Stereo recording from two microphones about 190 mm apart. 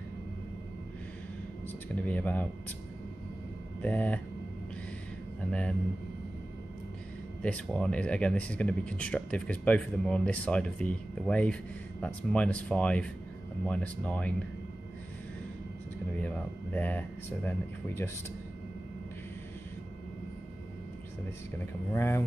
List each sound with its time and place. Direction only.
2.0 s speech: 10° left (ahead or behind)
3.8 s speech: 10° left (ahead or behind)
5.4 s a sound: 5° left (ahead or behind)
7.4 s speech: 5° left (ahead or behind)
16.2 s speech: 10° left (ahead or behind)
21.9 s speech: 10° left (ahead or behind)